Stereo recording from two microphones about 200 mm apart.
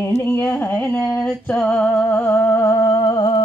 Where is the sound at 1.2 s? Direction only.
5° left (ahead or behind).